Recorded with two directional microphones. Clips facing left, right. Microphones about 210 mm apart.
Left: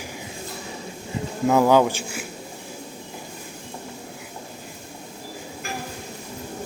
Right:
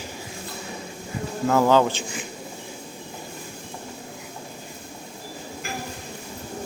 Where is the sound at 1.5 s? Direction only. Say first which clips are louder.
Left 2 dB; 15° left (ahead or behind).